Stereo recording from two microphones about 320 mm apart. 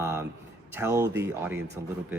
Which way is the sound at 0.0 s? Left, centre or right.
Centre.